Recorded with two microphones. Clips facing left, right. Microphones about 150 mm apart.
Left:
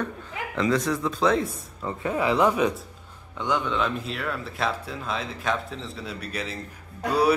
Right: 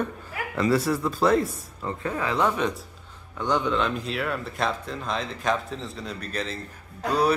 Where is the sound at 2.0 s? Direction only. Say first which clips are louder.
Left 3 dB; 15° left (ahead or behind).